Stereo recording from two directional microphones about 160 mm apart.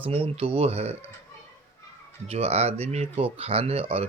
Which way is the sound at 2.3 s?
40° right (ahead or behind).